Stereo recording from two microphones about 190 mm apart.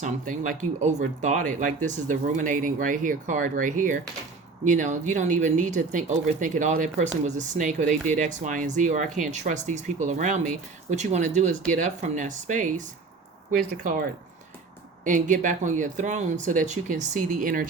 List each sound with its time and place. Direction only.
0.0 s speech: 40° right (ahead or behind)
15.0 s speech: 40° right (ahead or behind)